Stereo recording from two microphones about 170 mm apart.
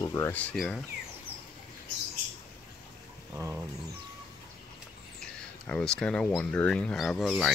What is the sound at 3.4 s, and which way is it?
Speech, 10° right (ahead or behind).